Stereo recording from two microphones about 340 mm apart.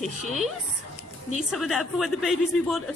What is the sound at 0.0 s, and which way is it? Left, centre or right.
Speech, centre.